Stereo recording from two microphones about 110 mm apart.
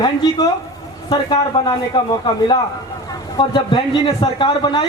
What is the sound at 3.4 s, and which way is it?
Speech, 50° left (ahead or behind).